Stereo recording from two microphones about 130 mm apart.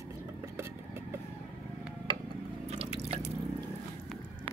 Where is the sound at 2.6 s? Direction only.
55° right (ahead or behind).